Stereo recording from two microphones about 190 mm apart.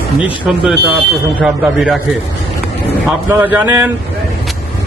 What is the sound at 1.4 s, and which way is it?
Speech, centre (ahead or behind).